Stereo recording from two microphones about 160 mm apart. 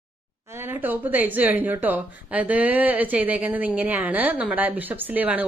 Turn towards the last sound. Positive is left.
turn(degrees=-10)  # may be behind; listen again after turning